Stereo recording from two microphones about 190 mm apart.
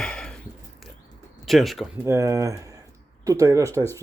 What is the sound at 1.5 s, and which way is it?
Speech, centre (ahead or behind).